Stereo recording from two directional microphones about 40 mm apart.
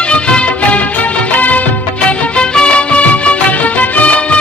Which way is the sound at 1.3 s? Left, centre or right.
Left.